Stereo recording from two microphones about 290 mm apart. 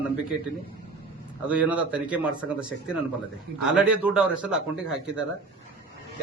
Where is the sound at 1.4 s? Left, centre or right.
Centre.